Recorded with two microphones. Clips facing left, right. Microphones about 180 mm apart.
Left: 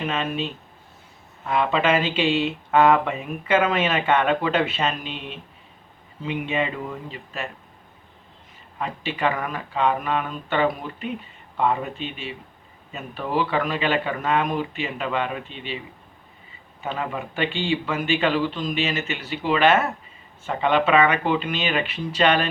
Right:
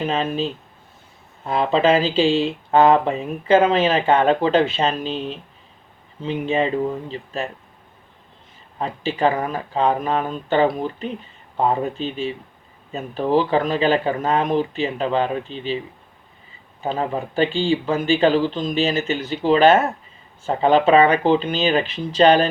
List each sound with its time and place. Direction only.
0.0 s speech: 35° right (ahead or behind)
8.8 s speech: 30° right (ahead or behind)
16.8 s speech: 30° right (ahead or behind)